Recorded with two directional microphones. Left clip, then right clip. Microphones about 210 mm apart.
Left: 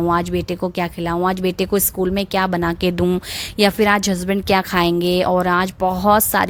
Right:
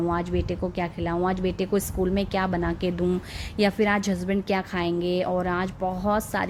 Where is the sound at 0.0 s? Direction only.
50° left (ahead or behind).